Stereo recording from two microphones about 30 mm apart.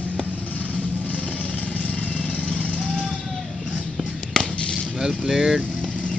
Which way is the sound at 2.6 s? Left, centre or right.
Left.